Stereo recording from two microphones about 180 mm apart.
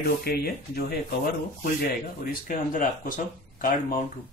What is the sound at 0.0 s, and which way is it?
Speech, 60° left (ahead or behind).